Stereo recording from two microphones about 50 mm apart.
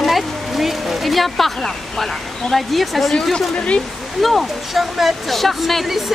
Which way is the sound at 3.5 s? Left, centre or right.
Left.